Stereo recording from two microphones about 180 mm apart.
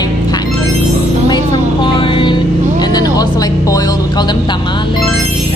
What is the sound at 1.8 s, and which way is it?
Music, 25° left (ahead or behind).